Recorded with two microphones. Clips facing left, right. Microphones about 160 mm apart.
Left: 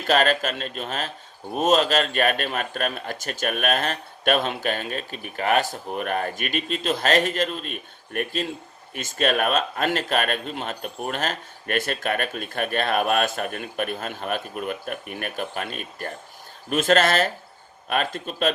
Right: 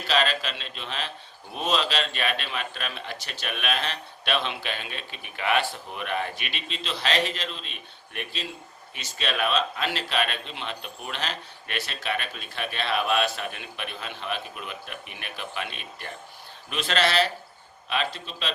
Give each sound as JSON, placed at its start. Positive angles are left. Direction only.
{"t": 0.0, "sound": "speech", "side_deg": 50}